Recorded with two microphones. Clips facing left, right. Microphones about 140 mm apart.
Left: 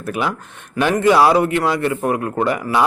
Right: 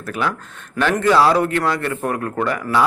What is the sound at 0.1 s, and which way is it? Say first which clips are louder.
A man's voice: left 1 dB; 15° left (ahead or behind).